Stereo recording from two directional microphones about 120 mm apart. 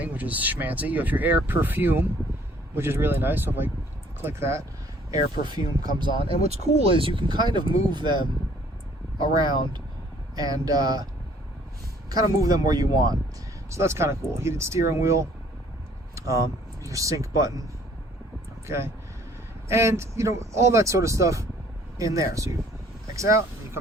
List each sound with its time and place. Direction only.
0.0 s speech: 15° right (ahead or behind)
5.1 s speech: 40° right (ahead or behind)
6.2 s speech: 55° right (ahead or behind)
9.3 s speech: 35° right (ahead or behind)
19.6 s speech: 25° right (ahead or behind)